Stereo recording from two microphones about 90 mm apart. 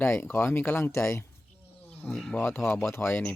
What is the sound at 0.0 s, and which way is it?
Speech, 25° left (ahead or behind).